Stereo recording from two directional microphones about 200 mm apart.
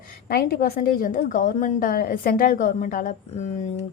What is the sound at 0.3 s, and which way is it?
A woman's voice, 50° left (ahead or behind).